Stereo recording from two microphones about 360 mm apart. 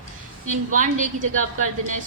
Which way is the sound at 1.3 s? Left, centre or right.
Right.